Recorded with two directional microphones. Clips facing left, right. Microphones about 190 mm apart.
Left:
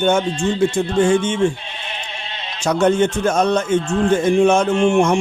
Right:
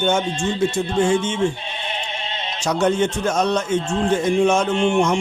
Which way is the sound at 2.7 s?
55° left (ahead or behind).